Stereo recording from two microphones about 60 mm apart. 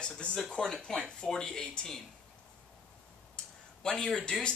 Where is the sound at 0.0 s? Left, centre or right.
Centre.